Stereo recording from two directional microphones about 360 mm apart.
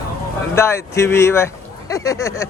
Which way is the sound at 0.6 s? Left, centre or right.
Centre.